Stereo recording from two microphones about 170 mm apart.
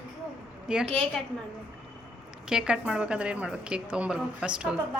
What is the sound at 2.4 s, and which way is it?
A woman's voice, 5° right (ahead or behind).